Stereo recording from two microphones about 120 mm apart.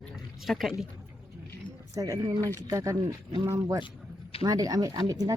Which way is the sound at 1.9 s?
30° right (ahead or behind).